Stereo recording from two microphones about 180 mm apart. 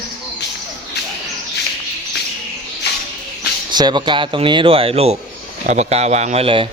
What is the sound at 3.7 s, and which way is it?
A man's voice, 25° right (ahead or behind).